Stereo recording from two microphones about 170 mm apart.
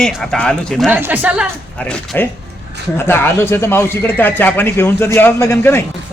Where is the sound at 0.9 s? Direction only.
10° right (ahead or behind).